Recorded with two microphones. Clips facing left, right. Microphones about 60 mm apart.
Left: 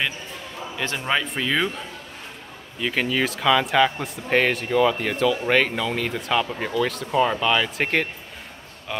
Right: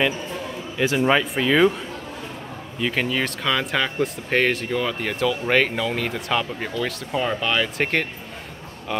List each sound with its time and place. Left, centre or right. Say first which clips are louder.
0.7 s speech: right 6 dB; centre
2.8 s speech: even; centre